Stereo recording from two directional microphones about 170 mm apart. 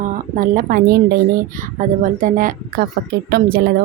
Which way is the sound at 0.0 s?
55° right (ahead or behind).